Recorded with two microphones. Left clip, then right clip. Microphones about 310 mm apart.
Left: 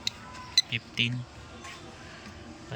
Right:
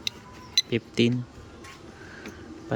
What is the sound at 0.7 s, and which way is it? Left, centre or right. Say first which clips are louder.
Speech: right 4 dB; centre.